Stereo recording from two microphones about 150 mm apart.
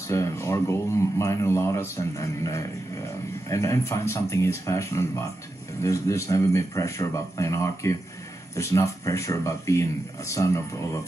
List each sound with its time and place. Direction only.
0.1 s speech: 20° left (ahead or behind)